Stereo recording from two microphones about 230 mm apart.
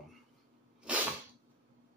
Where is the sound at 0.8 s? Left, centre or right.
Centre.